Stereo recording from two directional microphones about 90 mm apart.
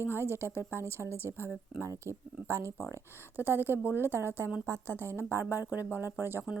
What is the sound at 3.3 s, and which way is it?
Speech, 20° right (ahead or behind).